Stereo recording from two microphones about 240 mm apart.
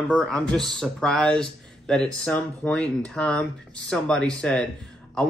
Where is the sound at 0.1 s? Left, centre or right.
Centre.